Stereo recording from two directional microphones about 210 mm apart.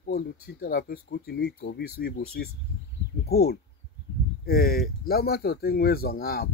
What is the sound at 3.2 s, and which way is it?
Speech, 50° left (ahead or behind).